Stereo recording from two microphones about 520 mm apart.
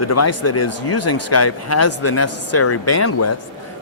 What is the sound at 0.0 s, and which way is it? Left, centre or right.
Speech, left.